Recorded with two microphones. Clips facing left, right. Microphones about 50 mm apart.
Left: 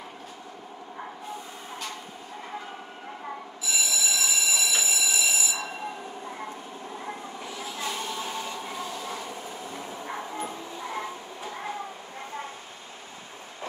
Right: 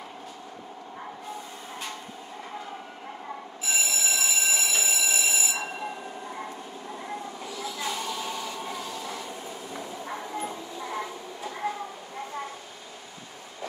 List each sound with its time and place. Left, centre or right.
3.6 s train: right
7.5 s vehicle: left
11.6 s a sound: left